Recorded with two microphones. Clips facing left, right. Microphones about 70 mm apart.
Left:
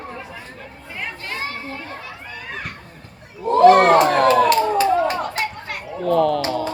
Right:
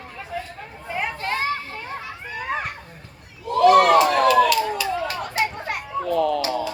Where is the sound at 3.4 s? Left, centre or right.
Left.